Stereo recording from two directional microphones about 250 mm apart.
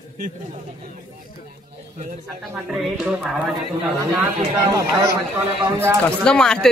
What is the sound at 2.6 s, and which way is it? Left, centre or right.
Speech, centre.